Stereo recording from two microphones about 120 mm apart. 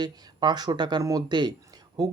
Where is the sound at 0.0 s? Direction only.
35° right (ahead or behind).